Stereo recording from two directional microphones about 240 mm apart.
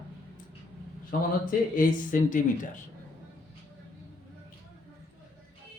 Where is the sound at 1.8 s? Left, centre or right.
Left.